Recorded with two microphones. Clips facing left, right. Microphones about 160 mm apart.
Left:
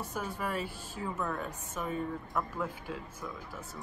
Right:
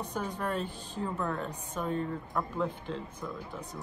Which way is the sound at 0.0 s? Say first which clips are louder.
Right 2 dB; 5° left (ahead or behind).